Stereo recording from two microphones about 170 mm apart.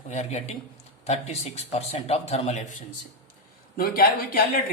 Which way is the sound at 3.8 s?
60° left (ahead or behind).